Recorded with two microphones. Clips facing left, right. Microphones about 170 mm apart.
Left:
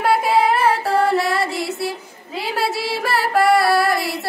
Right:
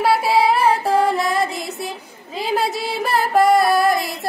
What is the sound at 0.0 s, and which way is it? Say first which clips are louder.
Child singing: even; 10° right (ahead or behind).